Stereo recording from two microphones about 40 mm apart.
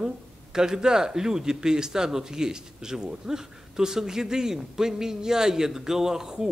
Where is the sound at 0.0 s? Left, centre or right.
Centre.